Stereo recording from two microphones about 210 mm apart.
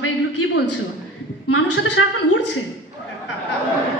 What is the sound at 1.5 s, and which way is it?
Speech, 80° left.